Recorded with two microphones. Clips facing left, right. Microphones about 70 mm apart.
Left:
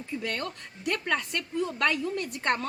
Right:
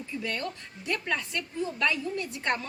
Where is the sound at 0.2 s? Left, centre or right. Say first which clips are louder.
Right 3 dB; left.